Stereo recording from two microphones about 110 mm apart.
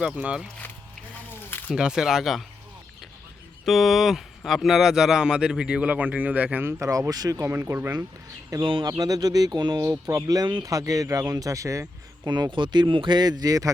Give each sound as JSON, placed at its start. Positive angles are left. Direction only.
{"t": 0.0, "sound": "speech", "side_deg": -10}
{"t": 1.5, "sound": "a sound", "side_deg": 20}
{"t": 1.7, "sound": "speech", "side_deg": -5}
{"t": 3.7, "sound": "speech", "side_deg": 0}
{"t": 8.6, "sound": "speech", "side_deg": -50}
{"t": 8.9, "sound": "speech", "side_deg": -35}
{"t": 12.3, "sound": "speech", "side_deg": -45}